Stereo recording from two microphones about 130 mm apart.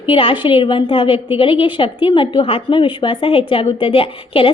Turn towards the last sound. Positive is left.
turn(degrees=45)  # may be behind; listen again after turning